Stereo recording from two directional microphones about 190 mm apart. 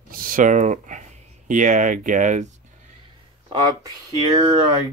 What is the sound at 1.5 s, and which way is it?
Speech, 40° right (ahead or behind).